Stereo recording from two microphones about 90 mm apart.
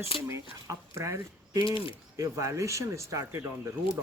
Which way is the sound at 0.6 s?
35° right (ahead or behind).